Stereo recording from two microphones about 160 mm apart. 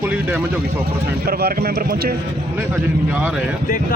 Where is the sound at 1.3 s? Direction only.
70° right (ahead or behind).